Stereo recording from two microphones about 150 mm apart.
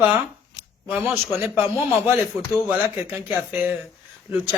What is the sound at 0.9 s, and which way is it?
Speech, 15° right (ahead or behind).